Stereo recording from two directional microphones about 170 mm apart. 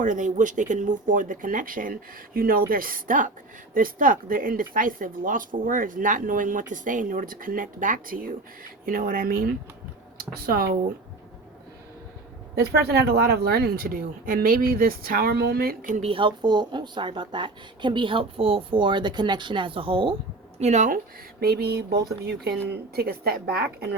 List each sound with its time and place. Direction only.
0.0 s speech: 50° right (ahead or behind)
12.5 s speech: 70° right (ahead or behind)
16.0 s speech: 35° right (ahead or behind)
20.6 s speech: 40° right (ahead or behind)
21.4 s speech: 70° right (ahead or behind)